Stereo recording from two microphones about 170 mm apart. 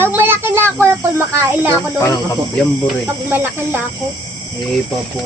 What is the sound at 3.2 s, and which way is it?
Speech, 10° right (ahead or behind).